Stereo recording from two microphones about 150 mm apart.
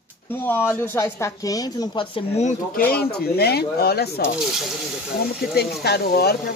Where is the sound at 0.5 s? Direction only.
15° left (ahead or behind).